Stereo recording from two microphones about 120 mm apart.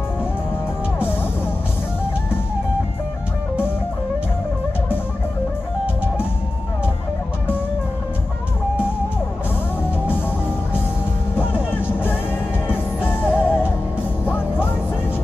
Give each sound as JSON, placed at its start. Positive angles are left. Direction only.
{"t": 0.9, "sound": "music", "side_deg": 15}
{"t": 11.7, "sound": "music", "side_deg": 15}